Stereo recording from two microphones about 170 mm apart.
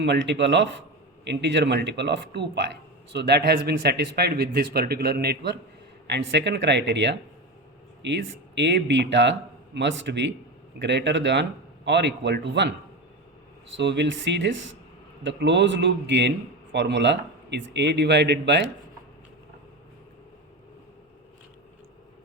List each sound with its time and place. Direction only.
0.0 s a man's voice: 90° right; by 5.5 s 75° right (ahead or behind)
6.1 s speech: 90° right